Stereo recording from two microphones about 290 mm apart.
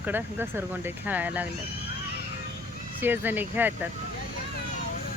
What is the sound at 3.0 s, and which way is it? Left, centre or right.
Speech, centre.